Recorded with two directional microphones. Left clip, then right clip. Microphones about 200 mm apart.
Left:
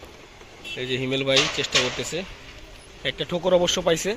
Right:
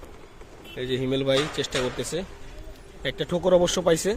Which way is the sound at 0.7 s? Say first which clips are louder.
Left 1 dB; 10° right (ahead or behind).